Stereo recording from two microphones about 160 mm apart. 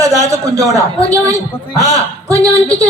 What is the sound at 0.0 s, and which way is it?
A man's voice, 20° right (ahead or behind).